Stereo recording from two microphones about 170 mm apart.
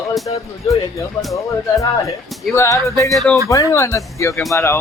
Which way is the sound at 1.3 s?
20° left (ahead or behind).